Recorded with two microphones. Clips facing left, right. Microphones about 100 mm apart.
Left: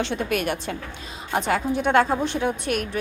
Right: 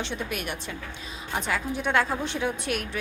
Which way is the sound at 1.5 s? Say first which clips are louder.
Left 6 dB; 55° left (ahead or behind).